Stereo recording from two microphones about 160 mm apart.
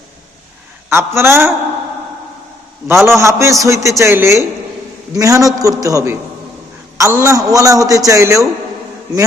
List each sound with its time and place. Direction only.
0.9 s a man's voice: 15° right (ahead or behind)
2.8 s a man's voice: 15° right (ahead or behind)